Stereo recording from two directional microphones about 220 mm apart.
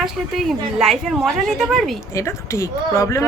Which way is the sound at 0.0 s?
Centre (ahead or behind).